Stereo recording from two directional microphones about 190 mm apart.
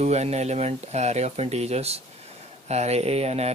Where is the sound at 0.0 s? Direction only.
35° right (ahead or behind).